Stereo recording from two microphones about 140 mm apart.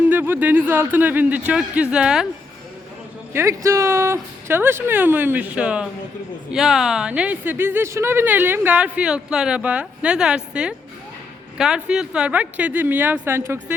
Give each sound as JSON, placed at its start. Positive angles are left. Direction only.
{"t": 0.1, "sound": "speech", "side_deg": -15}
{"t": 3.3, "sound": "speech", "side_deg": -20}